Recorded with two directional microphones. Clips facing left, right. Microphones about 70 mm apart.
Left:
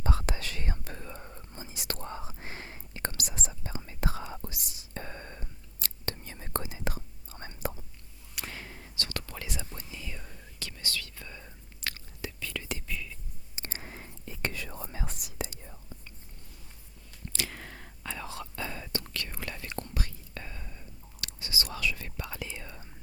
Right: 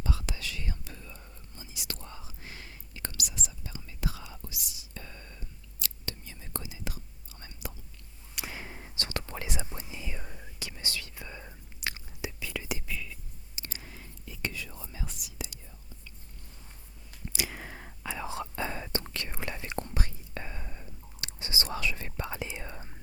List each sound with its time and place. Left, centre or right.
0.0 s whispering: left
8.4 s whispering: centre
13.6 s whispering: left
17.2 s whispering: centre; by 22.9 s right